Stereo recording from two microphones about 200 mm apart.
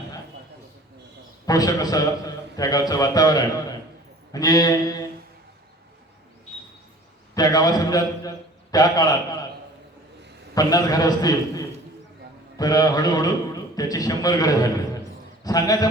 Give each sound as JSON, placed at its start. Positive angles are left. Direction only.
{"t": 1.5, "sound": "a man's voice", "side_deg": 20}
{"t": 7.3, "sound": "a man's voice", "side_deg": 20}
{"t": 10.5, "sound": "a man's voice", "side_deg": 20}